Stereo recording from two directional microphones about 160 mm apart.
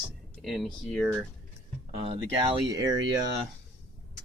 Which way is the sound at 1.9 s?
35° right (ahead or behind).